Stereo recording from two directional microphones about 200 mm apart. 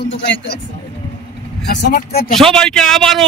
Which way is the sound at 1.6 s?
50° left (ahead or behind).